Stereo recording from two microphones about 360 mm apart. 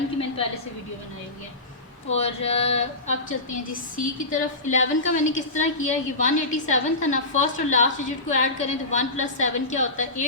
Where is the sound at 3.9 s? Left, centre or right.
Left.